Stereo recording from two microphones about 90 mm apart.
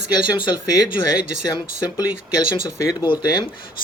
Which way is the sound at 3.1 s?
70° left (ahead or behind).